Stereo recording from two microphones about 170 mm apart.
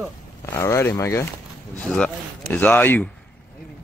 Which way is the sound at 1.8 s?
5° left (ahead or behind).